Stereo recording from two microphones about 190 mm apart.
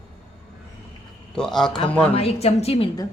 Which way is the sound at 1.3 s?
Centre (ahead or behind).